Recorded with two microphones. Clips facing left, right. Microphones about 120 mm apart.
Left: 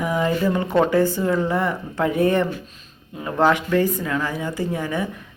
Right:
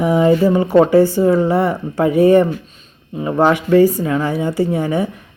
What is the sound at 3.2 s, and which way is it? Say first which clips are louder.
Speech: right 4 dB; 15° right (ahead or behind).